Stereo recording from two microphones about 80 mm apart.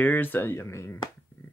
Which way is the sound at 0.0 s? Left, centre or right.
Left.